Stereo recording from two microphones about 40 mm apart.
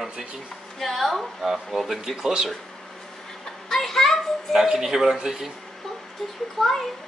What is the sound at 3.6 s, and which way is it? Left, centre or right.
Children playing, centre.